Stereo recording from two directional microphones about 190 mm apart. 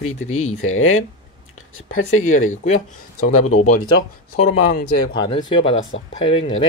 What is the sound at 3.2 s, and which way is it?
Speech, 40° left (ahead or behind).